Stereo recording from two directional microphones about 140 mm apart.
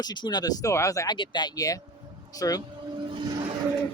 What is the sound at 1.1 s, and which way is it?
Speech, 35° left (ahead or behind).